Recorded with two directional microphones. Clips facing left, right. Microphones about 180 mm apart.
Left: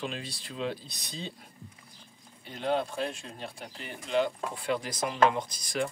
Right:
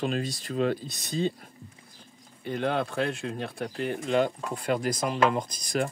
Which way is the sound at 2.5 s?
60° right (ahead or behind).